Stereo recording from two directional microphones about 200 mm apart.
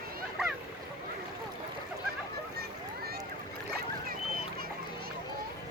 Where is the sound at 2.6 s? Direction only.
50° right (ahead or behind).